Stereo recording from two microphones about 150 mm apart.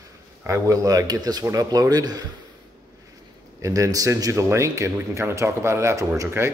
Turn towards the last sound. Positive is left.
turn(degrees=-20)  # may be behind; listen again after turning